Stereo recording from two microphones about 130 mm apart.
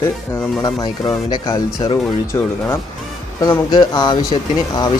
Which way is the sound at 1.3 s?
30° left (ahead or behind).